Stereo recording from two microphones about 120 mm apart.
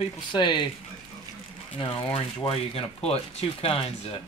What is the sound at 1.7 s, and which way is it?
Speech, 45° left (ahead or behind).